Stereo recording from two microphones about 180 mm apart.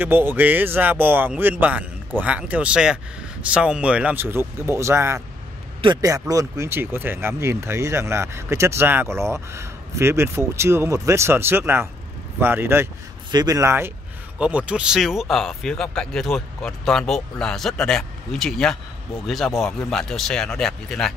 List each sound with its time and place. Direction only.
0.0 s speech: 10° right (ahead or behind)